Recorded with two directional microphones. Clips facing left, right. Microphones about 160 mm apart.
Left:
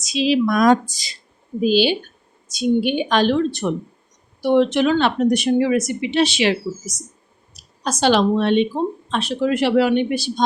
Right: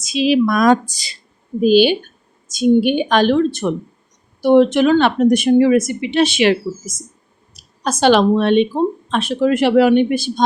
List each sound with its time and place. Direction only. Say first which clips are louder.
0.0 s speech: right 3 dB; 55° right (ahead or behind); by 1.1 s 70° right (ahead or behind)
1.6 s a woman's voice: right 5 dB; 50° right (ahead or behind)